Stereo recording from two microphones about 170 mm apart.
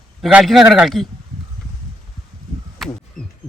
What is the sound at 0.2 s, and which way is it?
Speech, 5° right (ahead or behind).